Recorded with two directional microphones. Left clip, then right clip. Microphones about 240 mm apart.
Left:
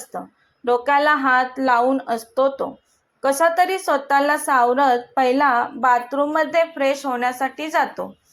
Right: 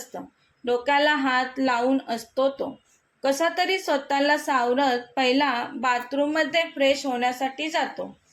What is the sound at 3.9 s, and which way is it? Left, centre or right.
Speech, centre.